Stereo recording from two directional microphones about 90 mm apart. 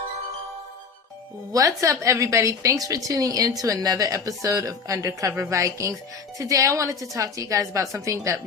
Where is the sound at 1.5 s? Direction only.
35° right (ahead or behind).